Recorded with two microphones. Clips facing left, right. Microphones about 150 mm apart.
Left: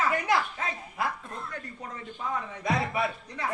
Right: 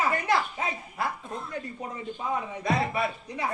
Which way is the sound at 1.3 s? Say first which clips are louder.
Right 4 dB; 15° right (ahead or behind).